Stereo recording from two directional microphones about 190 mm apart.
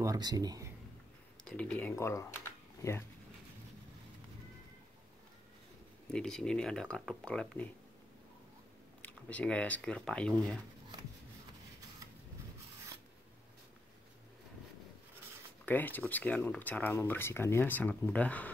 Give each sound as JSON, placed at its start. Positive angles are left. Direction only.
{"t": 0.0, "sound": "speech", "side_deg": -20}
{"t": 1.4, "sound": "speech", "side_deg": 5}
{"t": 6.0, "sound": "speech", "side_deg": 5}
{"t": 9.0, "sound": "speech", "side_deg": 5}
{"t": 15.6, "sound": "speech", "side_deg": 10}